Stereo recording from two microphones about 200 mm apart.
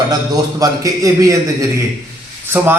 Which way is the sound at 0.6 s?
15° right (ahead or behind).